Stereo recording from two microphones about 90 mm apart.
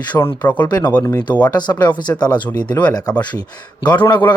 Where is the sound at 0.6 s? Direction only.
45° left (ahead or behind).